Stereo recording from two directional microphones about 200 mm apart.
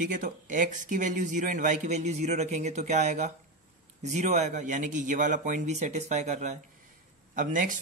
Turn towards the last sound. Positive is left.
turn(degrees=-40)  # may be behind; listen again after turning